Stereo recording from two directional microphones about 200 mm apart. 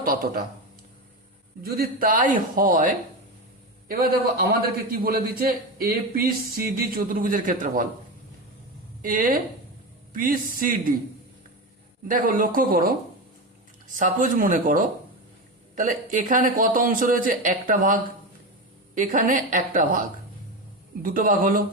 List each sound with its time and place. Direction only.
0.0 s speech: 45° right (ahead or behind)
1.6 s a man's voice: 50° right (ahead or behind)
9.0 s a man's voice: 45° right (ahead or behind)
12.0 s a man's voice: 45° right (ahead or behind)
21.0 s a man's voice: 45° right (ahead or behind)